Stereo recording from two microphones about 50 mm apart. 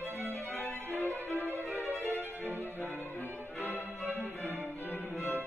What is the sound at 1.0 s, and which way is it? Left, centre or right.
Violin, left.